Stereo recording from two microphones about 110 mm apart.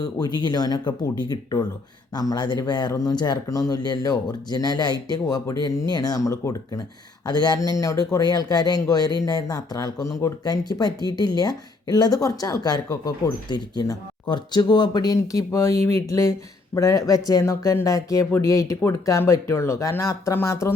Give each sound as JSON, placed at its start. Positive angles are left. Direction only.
{"t": 0.0, "sound": "speech", "side_deg": 40}